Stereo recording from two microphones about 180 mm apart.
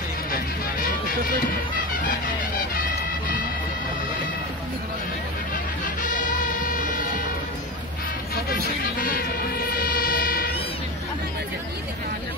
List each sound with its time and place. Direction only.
2.0 s music: 50° left (ahead or behind)
6.0 s vehicle: 45° left (ahead or behind)
9.0 s music: 55° left (ahead or behind)